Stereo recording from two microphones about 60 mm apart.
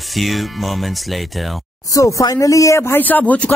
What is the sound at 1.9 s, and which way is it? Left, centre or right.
Speech, left.